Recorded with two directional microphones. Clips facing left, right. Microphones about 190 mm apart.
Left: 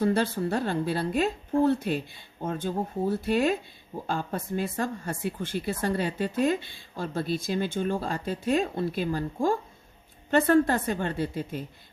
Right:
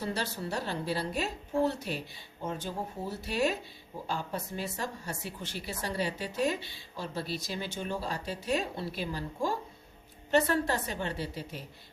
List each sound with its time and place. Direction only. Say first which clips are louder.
0.0 s speech: left 10 dB; 55° left (ahead or behind)